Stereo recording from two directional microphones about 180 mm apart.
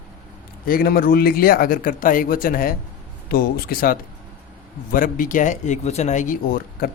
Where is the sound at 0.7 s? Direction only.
55° left (ahead or behind).